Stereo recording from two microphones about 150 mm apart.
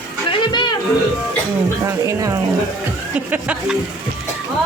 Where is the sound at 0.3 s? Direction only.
30° left (ahead or behind).